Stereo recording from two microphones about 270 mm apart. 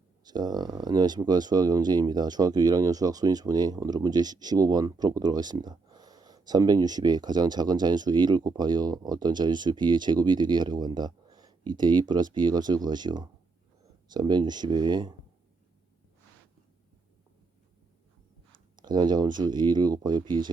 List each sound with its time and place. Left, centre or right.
0.3 s speech: centre
18.8 s speech: centre